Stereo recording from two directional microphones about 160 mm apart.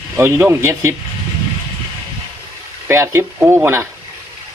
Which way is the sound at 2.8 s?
15° right (ahead or behind).